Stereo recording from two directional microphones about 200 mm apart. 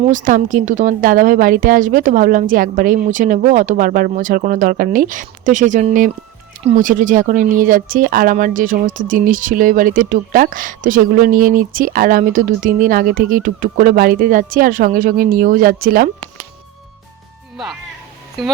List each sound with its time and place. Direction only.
0.1 s a woman's voice: 40° right (ahead or behind)
17.6 s speech: centre (ahead or behind)